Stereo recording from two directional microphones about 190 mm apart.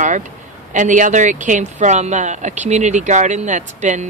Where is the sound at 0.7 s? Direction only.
40° right (ahead or behind).